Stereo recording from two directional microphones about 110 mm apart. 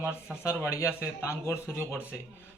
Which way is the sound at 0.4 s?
25° left (ahead or behind).